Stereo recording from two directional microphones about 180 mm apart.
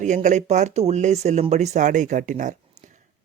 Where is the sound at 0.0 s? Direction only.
40° right (ahead or behind).